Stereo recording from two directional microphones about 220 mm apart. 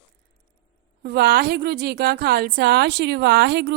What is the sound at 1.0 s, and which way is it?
A woman's voice, 45° right (ahead or behind).